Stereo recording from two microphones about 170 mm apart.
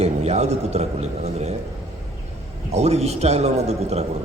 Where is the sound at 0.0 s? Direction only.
40° right (ahead or behind).